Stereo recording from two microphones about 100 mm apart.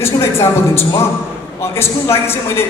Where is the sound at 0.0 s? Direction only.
25° left (ahead or behind).